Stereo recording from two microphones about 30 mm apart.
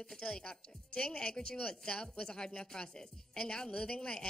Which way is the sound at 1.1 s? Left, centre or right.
Left.